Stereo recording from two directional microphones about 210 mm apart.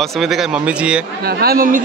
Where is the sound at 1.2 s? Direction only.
45° right (ahead or behind).